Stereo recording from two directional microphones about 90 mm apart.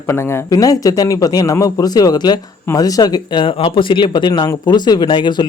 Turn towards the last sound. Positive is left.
turn(degrees=60)  # may be behind; listen again after turning